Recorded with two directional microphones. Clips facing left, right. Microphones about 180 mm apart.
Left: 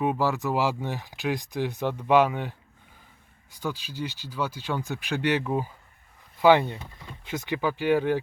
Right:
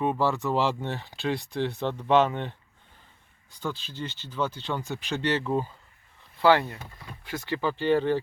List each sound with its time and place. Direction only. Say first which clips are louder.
0.0 s speech: even; 10° left (ahead or behind)
3.6 s speech: left 2 dB; 10° left (ahead or behind)